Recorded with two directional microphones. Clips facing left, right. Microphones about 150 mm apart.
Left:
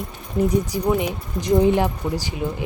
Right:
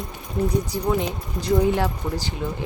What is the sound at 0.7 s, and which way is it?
Speech, 15° left (ahead or behind).